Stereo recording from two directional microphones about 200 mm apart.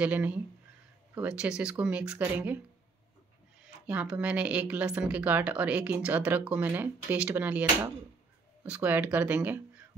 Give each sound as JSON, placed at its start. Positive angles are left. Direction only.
{"t": 0.0, "sound": "speech", "side_deg": -10}
{"t": 3.8, "sound": "speech", "side_deg": -10}